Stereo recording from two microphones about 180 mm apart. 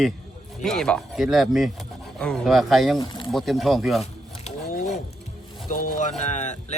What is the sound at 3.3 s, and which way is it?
Speech, centre (ahead or behind).